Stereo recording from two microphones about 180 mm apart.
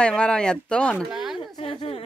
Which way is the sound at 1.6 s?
30° left (ahead or behind).